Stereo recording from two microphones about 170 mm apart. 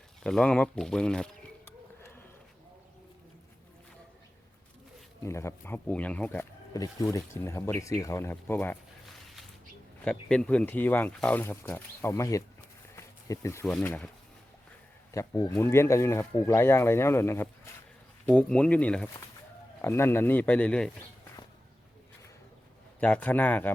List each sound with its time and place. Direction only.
0.2 s speech: 5° left (ahead or behind)
5.2 s speech: 15° left (ahead or behind)
6.7 s speech: 20° left (ahead or behind)
10.0 s speech: 5° left (ahead or behind)
13.0 s insect: 20° left (ahead or behind)
13.7 s speech: 10° left (ahead or behind)
15.1 s speech: 20° left (ahead or behind)
23.0 s speech: 10° left (ahead or behind)